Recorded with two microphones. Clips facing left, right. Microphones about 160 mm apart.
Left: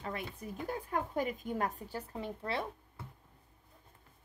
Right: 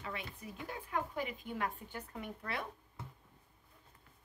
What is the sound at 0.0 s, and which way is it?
A woman's voice, 45° left (ahead or behind).